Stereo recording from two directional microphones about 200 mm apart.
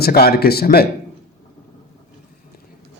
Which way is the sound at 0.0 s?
50° left (ahead or behind).